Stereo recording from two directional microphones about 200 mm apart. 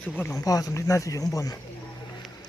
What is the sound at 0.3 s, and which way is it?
Speech, 20° left (ahead or behind).